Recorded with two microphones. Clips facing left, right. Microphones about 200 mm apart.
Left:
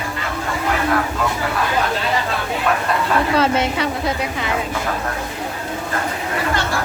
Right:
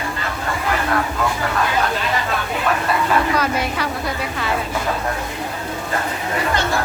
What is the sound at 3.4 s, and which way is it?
Speech, 25° left (ahead or behind).